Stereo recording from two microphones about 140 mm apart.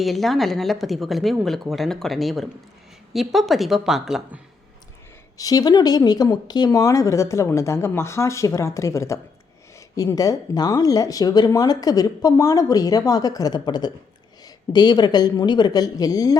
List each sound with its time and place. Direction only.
0.0 s a woman's voice: centre (ahead or behind)
5.4 s speech: 25° left (ahead or behind)